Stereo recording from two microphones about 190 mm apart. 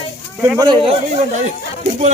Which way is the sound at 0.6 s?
25° right (ahead or behind).